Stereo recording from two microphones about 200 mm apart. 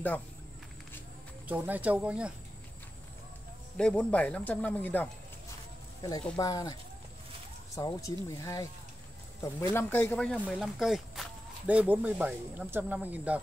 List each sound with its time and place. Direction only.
1.5 s speech: 10° right (ahead or behind)
3.7 s speech: 5° left (ahead or behind)
6.3 s speech: 20° left (ahead or behind)
7.7 s speech: 15° left (ahead or behind); by 13.4 s 10° right (ahead or behind)